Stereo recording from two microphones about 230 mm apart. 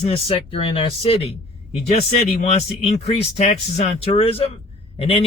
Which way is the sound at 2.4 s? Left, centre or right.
Left.